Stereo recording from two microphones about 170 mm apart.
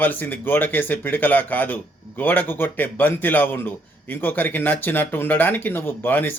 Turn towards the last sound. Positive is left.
turn(degrees=10)  # may be behind; listen again after turning